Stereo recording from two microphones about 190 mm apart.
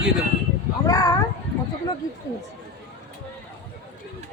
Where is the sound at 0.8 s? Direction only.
20° left (ahead or behind).